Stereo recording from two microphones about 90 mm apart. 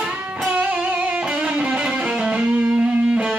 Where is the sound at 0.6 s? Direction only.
15° right (ahead or behind).